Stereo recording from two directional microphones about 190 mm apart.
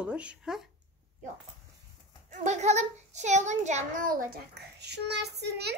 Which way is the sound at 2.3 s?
40° right (ahead or behind).